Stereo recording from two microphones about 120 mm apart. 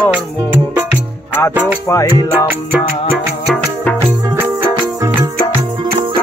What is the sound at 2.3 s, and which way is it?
Music, 15° right (ahead or behind).